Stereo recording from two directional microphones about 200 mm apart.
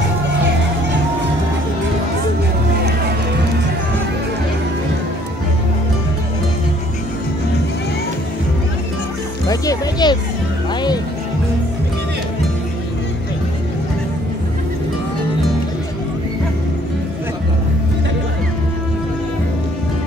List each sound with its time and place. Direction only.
9.5 s music: 20° left (ahead or behind)